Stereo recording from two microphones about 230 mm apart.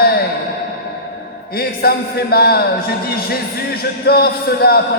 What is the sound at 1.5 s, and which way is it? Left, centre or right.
A man's voice, left.